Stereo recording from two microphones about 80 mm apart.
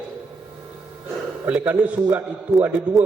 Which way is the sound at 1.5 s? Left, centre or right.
Centre.